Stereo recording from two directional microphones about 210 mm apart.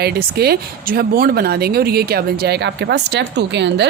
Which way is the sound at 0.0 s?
50° right (ahead or behind).